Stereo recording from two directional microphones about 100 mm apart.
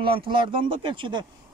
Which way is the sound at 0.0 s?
60° right (ahead or behind).